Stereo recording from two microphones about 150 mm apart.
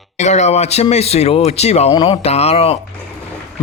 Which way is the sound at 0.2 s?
50° left (ahead or behind).